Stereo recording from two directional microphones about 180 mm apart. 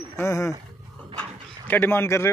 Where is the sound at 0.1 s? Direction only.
15° left (ahead or behind).